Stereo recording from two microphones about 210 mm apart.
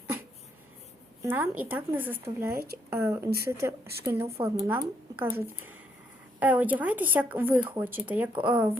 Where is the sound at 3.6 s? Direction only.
10° right (ahead or behind).